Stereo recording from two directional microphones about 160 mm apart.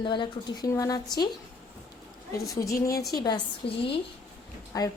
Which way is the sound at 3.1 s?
25° left (ahead or behind).